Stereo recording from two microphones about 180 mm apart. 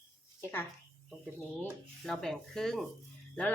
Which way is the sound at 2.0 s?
5° left (ahead or behind).